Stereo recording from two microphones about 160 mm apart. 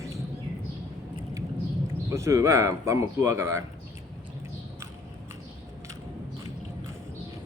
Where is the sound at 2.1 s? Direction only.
20° right (ahead or behind).